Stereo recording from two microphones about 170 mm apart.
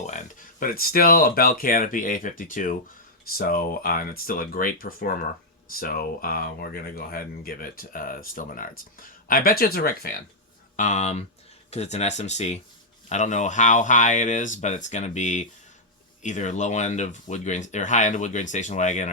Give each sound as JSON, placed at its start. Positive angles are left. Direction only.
{"t": 0.0, "sound": "speech", "side_deg": 45}
{"t": 10.8, "sound": "speech", "side_deg": 45}